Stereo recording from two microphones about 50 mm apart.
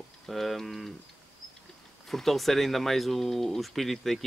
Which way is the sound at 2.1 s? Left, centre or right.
Centre.